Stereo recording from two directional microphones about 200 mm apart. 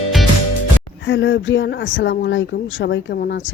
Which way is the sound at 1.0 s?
65° left (ahead or behind).